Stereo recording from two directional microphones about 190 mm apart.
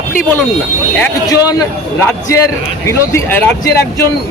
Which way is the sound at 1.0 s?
20° left (ahead or behind).